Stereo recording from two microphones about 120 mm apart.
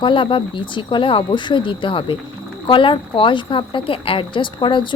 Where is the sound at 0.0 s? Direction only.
45° left (ahead or behind).